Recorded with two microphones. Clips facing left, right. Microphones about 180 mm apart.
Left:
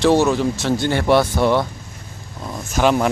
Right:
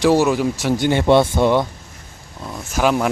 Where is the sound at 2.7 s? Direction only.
5° right (ahead or behind).